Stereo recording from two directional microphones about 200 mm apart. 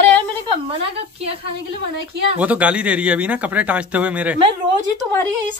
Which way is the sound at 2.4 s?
5° right (ahead or behind).